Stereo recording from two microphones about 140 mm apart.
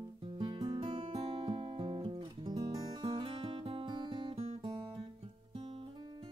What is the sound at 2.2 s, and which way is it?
Music, 30° right (ahead or behind).